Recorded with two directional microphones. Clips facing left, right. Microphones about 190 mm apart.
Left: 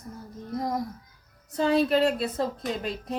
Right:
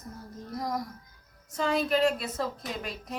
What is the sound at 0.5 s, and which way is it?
A child's voice, 25° left (ahead or behind).